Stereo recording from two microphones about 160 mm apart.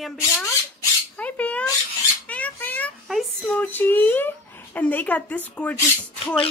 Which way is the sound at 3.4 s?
10° left (ahead or behind).